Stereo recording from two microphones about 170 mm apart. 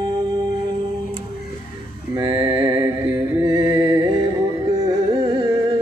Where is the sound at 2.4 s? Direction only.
20° right (ahead or behind).